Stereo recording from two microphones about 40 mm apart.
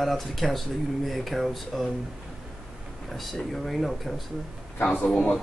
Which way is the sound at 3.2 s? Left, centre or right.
Centre.